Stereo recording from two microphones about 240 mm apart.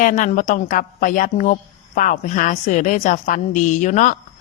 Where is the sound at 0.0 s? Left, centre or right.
Left.